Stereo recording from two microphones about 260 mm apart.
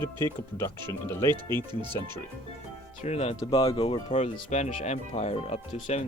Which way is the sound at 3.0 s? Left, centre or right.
Left.